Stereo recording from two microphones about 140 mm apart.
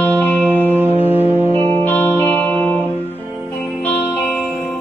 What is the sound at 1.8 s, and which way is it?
Music, 15° left (ahead or behind).